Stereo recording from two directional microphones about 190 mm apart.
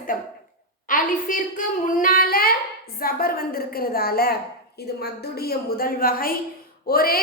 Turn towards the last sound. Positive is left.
turn(degrees=50)  # may be behind; listen again after turning